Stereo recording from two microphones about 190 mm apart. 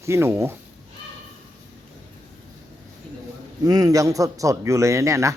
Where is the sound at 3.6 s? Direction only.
20° right (ahead or behind).